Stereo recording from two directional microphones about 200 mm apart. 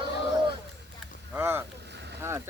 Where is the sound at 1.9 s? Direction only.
55° right (ahead or behind).